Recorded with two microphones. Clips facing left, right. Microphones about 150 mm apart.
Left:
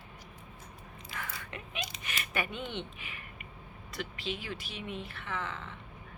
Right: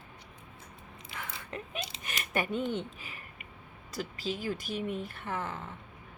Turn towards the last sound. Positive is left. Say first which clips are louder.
# right 2 dB
turn(degrees=-45)  # may be behind; listen again after turning